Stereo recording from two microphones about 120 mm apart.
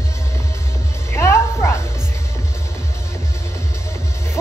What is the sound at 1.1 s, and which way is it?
Music, 20° left (ahead or behind).